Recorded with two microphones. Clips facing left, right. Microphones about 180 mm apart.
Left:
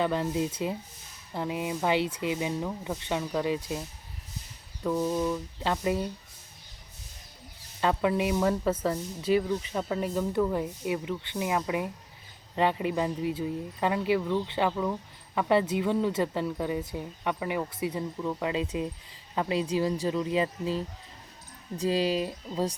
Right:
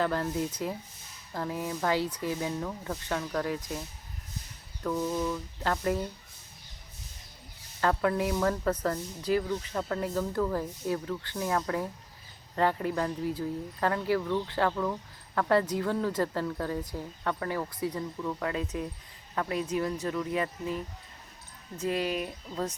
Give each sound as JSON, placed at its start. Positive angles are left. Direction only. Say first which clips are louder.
{"t": 0.0, "sound": "speech", "louder": "left 2 dB", "side_deg": 20}
{"t": 7.8, "sound": "speech", "louder": "left 1 dB", "side_deg": 15}
{"t": 15.4, "sound": "speech", "louder": "left 1 dB", "side_deg": 20}